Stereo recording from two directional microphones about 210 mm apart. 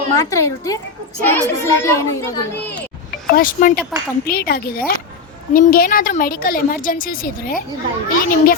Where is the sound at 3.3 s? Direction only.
40° left (ahead or behind).